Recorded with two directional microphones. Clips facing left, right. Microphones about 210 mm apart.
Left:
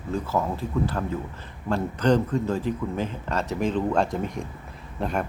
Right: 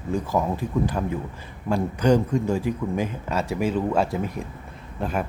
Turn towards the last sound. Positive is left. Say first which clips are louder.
# even
turn(degrees=0)  # may be behind; listen again after turning